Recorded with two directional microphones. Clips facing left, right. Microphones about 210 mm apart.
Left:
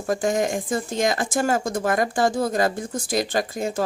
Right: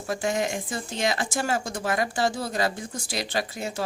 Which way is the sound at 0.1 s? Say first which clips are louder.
Left 5 dB; 45° left (ahead or behind).